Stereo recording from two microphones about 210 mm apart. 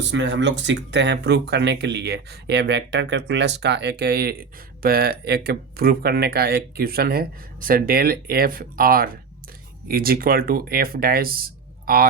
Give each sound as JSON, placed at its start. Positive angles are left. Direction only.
{"t": 0.0, "sound": "speech", "side_deg": -60}